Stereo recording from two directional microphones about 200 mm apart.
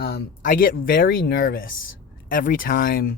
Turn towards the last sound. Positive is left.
turn(degrees=45)  # may be behind; listen again after turning